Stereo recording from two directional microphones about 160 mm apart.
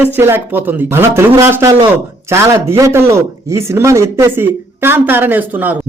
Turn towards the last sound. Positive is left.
turn(degrees=-10)  # may be behind; listen again after turning